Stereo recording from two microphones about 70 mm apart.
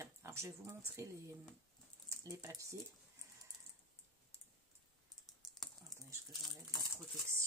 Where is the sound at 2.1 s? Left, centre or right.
Right.